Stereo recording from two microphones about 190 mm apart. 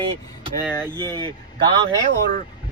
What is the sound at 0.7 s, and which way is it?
Speech, 10° right (ahead or behind).